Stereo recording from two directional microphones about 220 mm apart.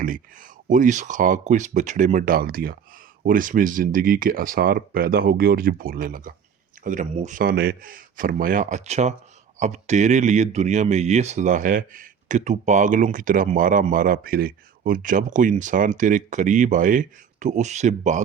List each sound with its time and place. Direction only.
0.0 s speech: 40° right (ahead or behind)